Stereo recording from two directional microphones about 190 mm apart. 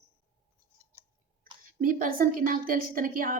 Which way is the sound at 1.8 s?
50° right (ahead or behind).